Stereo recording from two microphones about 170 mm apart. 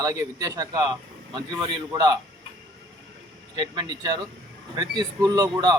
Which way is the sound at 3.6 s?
25° right (ahead or behind).